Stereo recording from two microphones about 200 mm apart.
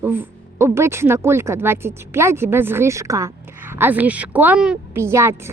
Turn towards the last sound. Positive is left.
turn(degrees=-15)  # may be behind; listen again after turning